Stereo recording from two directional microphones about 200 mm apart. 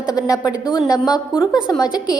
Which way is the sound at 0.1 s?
20° left (ahead or behind).